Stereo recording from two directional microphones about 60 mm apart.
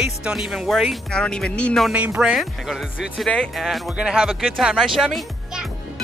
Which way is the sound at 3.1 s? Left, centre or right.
Centre.